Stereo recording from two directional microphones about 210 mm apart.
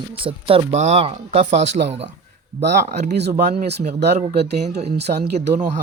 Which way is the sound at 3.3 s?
35° right (ahead or behind).